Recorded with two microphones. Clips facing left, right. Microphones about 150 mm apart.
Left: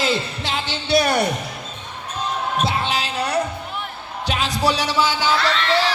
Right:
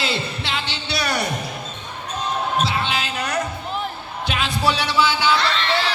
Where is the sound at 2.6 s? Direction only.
35° left (ahead or behind).